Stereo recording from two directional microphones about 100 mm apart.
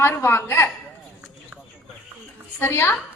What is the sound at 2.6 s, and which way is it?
Speech, 25° left (ahead or behind).